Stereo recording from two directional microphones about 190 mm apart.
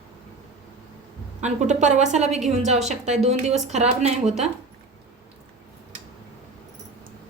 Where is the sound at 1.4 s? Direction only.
40° right (ahead or behind).